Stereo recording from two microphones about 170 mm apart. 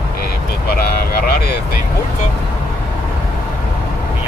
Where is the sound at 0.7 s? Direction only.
60° left (ahead or behind).